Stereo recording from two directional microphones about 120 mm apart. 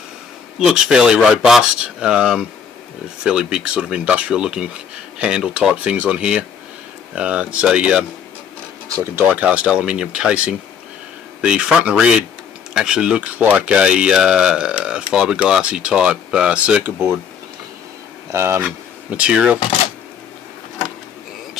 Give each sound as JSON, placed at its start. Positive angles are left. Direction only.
{"t": 0.6, "sound": "speech", "side_deg": -5}
{"t": 8.8, "sound": "speech", "side_deg": -25}
{"t": 18.3, "sound": "speech", "side_deg": -20}
{"t": 19.0, "sound": "speech", "side_deg": -10}